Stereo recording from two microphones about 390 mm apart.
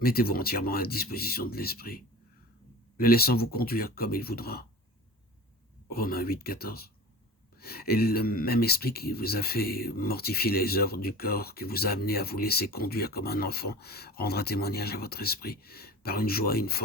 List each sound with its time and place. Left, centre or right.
0.0 s speech: left
3.0 s speech: left
5.9 s speech: left